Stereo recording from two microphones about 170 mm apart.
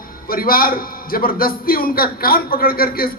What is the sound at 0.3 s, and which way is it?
A man's voice, 60° left (ahead or behind).